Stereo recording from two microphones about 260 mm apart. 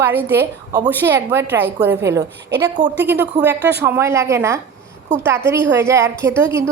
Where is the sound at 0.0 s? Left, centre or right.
Centre.